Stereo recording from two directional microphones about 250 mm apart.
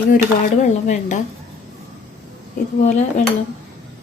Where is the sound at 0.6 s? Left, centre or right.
Left.